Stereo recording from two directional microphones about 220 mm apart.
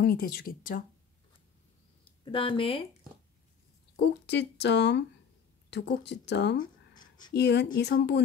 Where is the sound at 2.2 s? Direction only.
25° left (ahead or behind).